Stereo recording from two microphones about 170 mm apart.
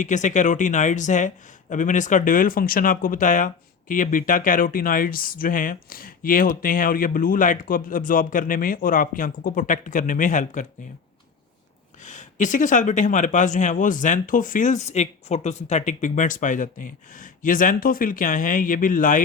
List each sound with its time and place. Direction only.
0.0 s speech: 45° left (ahead or behind)
12.0 s speech: 45° left (ahead or behind)